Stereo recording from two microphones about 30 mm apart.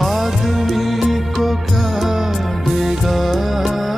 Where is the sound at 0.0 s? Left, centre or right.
Centre.